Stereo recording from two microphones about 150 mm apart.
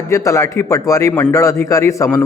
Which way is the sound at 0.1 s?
20° left (ahead or behind).